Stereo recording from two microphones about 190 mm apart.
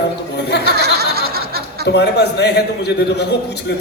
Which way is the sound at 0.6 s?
60° right (ahead or behind).